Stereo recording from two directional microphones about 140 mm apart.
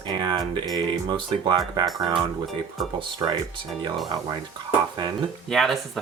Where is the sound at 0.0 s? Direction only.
30° right (ahead or behind).